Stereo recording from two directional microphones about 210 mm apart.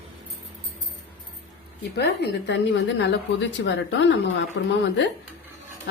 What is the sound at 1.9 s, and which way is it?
A woman's voice, 50° left (ahead or behind).